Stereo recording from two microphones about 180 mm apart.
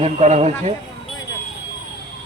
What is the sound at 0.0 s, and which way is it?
Speech, 35° right (ahead or behind).